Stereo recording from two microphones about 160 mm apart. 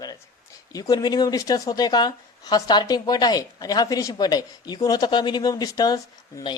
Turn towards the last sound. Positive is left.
turn(degrees=25)  # may be behind; listen again after turning